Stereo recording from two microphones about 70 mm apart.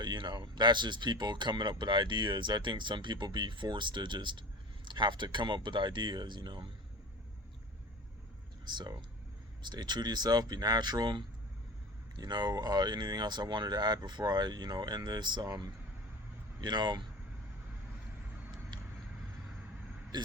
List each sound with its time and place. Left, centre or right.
0.0 s speech: right
8.6 s speech: right
16.6 s speech: right
18.7 s vehicle: right
20.1 s speech: right